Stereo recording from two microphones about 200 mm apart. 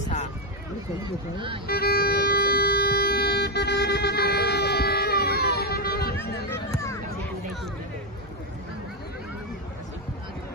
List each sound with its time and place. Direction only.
1.7 s music: 50° left (ahead or behind)